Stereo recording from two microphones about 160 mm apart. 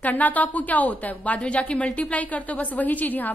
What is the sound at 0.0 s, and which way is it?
A woman's voice, 10° left (ahead or behind).